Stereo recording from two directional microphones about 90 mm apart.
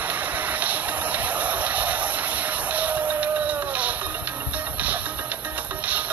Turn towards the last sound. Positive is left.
turn(degrees=-15)  # may be behind; listen again after turning